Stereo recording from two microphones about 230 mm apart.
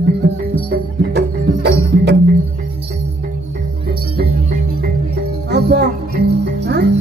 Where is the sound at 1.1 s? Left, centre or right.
Right.